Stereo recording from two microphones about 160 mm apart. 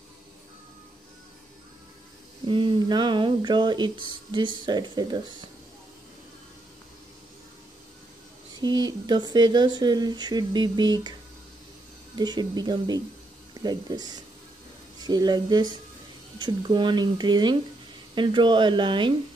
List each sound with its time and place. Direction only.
2.4 s speech: 30° right (ahead or behind)
8.5 s speech: 25° right (ahead or behind)
12.2 s speech: 25° right (ahead or behind)